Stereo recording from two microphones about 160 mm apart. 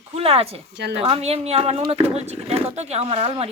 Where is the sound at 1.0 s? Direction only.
40° right (ahead or behind).